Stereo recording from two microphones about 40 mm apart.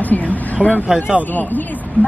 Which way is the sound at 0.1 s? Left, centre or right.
Left.